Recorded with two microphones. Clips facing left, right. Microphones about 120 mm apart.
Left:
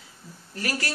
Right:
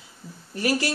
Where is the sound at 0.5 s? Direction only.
20° right (ahead or behind).